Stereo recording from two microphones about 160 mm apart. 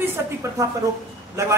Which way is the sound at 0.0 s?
15° right (ahead or behind).